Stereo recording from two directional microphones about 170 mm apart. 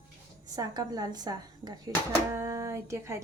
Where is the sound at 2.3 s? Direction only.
20° right (ahead or behind).